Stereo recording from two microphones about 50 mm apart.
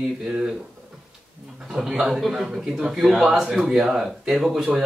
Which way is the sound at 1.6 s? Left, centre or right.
Centre.